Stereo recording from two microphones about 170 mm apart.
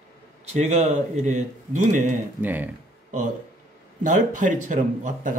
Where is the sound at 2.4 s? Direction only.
10° right (ahead or behind).